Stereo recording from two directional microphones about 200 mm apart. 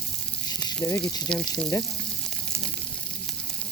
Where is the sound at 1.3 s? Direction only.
5° left (ahead or behind).